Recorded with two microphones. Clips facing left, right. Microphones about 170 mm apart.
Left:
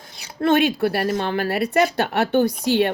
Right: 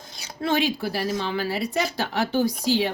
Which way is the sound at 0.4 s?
60° left (ahead or behind).